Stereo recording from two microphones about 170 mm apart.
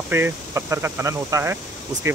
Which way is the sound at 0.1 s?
15° right (ahead or behind).